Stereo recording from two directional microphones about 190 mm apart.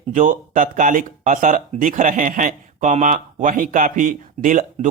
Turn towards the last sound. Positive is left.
turn(degrees=-45)  # may be behind; listen again after turning